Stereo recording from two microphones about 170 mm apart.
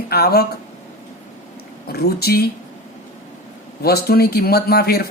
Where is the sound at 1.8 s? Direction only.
65° left (ahead or behind).